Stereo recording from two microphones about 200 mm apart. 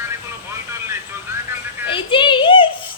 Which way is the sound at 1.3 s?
10° right (ahead or behind).